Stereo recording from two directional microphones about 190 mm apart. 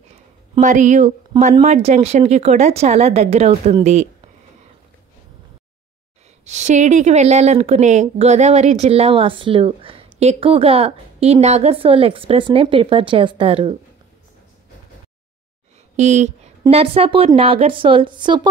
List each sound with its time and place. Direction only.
0.1 s a sound: 40° right (ahead or behind)
1.4 s a woman's voice: 35° right (ahead or behind)
6.4 s a woman's voice: 35° right (ahead or behind)
16.0 s a woman's voice: 35° right (ahead or behind)